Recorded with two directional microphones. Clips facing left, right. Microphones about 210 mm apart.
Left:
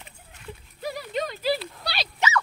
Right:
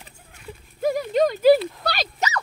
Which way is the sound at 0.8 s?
45° right (ahead or behind).